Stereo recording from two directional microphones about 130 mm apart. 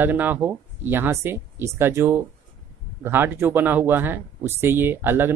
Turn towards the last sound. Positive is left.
turn(degrees=-15)  # may be behind; listen again after turning